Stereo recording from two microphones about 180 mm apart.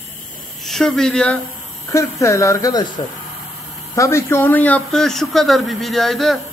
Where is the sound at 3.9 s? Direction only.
15° left (ahead or behind).